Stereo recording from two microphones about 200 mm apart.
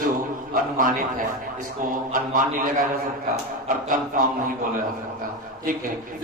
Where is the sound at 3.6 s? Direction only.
45° right (ahead or behind).